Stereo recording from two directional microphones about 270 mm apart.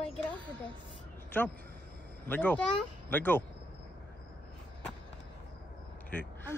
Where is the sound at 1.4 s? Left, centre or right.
Centre.